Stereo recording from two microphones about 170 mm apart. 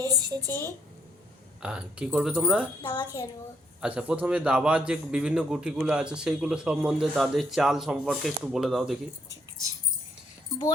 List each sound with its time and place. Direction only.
0.0 s a sound: 20° right (ahead or behind)
0.4 s a woman's voice: 10° left (ahead or behind)
1.6 s a man's voice: 5° right (ahead or behind)
2.8 s a child's voice: 25° left (ahead or behind)
3.8 s a man's voice: 5° right (ahead or behind)